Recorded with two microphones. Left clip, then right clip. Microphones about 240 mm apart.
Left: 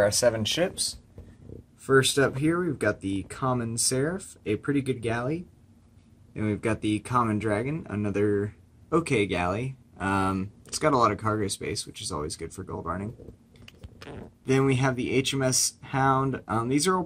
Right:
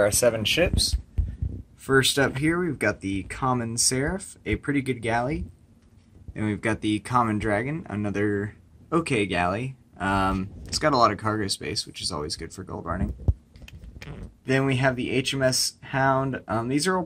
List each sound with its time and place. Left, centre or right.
0.0 s speech: centre
14.4 s speech: centre